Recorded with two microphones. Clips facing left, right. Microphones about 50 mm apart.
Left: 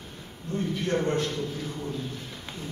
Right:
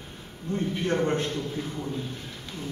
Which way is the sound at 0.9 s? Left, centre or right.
Right.